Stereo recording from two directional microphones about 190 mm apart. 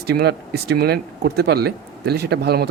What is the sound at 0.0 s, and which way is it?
Speech, 55° right (ahead or behind).